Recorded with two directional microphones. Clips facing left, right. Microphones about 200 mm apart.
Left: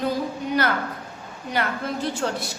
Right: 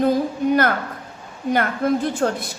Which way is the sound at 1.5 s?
50° right (ahead or behind).